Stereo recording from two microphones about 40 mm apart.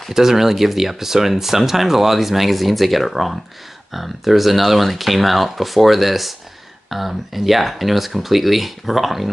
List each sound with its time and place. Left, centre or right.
0.1 s speech: centre